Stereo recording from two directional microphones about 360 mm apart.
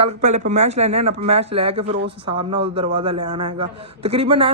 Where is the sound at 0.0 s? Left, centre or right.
Centre.